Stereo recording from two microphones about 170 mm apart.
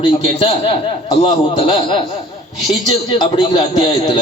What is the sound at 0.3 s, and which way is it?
Speech, 30° left (ahead or behind).